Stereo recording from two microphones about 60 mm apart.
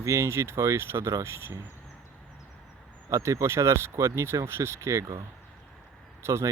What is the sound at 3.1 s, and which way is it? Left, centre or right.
Speech, right.